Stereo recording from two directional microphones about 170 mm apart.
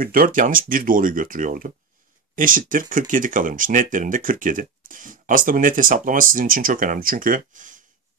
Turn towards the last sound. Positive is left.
turn(degrees=-50)  # may be behind; listen again after turning